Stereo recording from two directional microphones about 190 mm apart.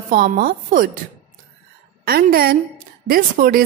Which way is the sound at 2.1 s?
50° right (ahead or behind).